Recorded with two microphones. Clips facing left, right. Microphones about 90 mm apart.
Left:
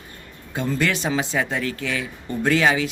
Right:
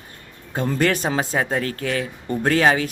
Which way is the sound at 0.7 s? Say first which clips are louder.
Right 2 dB; 40° right (ahead or behind).